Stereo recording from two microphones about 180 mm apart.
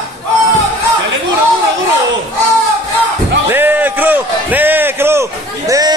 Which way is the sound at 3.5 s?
10° right (ahead or behind).